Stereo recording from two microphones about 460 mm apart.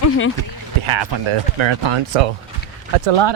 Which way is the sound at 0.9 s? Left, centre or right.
Right.